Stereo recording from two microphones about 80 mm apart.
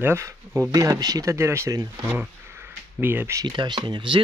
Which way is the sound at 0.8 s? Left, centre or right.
Right.